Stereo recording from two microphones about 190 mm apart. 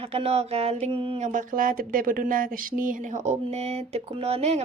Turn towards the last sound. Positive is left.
turn(degrees=-30)  # may be behind; listen again after turning